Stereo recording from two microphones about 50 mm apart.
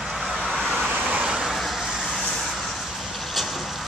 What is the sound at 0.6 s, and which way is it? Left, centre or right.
Vehicle, centre.